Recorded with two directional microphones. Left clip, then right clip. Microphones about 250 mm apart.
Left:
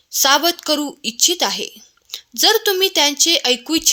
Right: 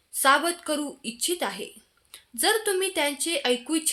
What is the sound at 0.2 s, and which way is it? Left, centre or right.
Speech, left.